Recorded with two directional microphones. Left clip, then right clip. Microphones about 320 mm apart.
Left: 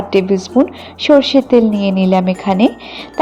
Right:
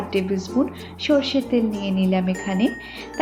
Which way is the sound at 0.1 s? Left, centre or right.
Left.